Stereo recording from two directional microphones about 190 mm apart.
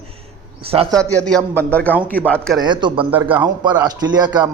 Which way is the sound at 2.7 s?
25° right (ahead or behind).